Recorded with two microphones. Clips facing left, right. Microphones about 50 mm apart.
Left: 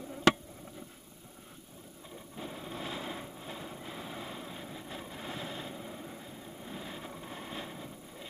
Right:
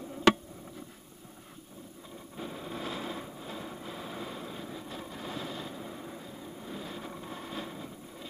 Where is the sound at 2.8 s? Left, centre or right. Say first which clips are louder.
Right 2 dB; centre.